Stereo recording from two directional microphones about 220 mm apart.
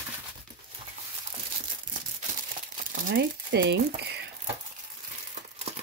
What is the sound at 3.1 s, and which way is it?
Speech, 50° right (ahead or behind).